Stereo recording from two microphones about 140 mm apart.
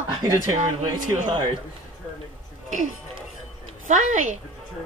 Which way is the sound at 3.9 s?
65° right (ahead or behind).